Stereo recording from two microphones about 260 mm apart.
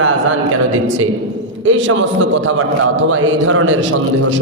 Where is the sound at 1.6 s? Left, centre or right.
Right.